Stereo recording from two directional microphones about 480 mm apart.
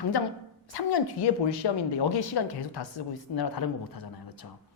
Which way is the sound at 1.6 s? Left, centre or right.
Left.